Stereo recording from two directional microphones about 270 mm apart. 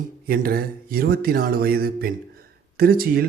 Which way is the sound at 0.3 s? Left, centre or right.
Right.